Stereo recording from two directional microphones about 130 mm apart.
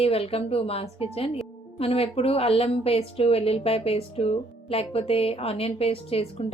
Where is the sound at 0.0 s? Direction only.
50° left (ahead or behind).